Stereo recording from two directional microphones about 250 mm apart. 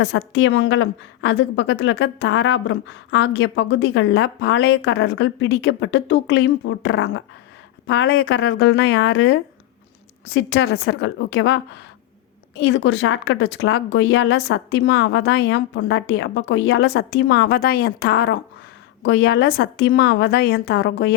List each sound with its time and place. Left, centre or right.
0.0 s a woman's voice: left